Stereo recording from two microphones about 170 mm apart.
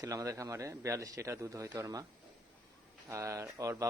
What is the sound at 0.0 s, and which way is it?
Speech, 20° right (ahead or behind).